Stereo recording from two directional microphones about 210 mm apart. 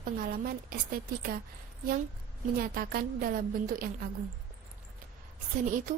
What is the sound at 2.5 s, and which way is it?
A woman's voice, 45° right (ahead or behind).